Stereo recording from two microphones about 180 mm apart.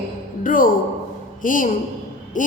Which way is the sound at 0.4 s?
50° left (ahead or behind).